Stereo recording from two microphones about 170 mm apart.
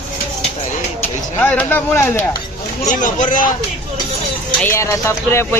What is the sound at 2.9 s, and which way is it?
Speech, 50° left (ahead or behind).